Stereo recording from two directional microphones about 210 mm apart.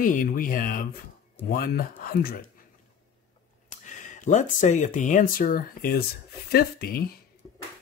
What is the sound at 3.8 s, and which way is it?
Speech, 35° left (ahead or behind).